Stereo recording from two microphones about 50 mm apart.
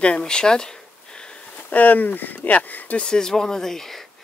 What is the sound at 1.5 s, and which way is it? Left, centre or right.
Speech, left.